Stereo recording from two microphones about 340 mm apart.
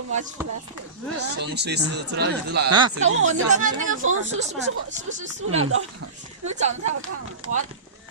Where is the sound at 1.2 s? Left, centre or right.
Right.